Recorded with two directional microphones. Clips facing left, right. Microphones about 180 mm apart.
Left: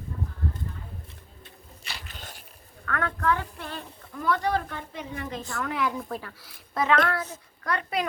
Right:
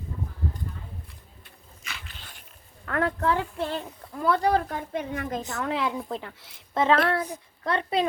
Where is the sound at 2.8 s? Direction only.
25° right (ahead or behind).